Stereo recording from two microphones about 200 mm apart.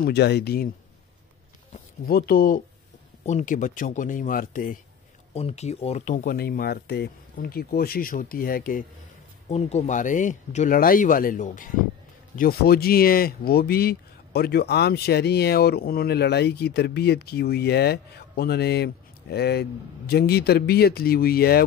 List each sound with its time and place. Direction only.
0.0 s speech: 55° left (ahead or behind)
1.7 s speech: 50° left (ahead or behind)
5.3 s speech: 30° left (ahead or behind)
9.5 s speech: 35° left (ahead or behind); by 21.6 s 50° left (ahead or behind)